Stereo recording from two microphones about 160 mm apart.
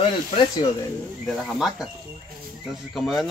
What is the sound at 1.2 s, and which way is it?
Speech, centre (ahead or behind).